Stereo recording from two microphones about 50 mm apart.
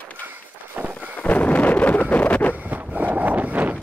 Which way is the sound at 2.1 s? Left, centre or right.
Left.